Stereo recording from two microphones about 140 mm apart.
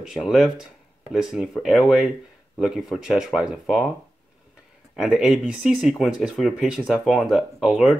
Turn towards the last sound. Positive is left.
turn(degrees=0)  # may be behind; listen again after turning